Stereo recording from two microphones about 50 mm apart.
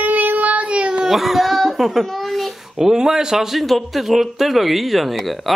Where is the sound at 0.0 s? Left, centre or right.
Right; by 1.1 s centre.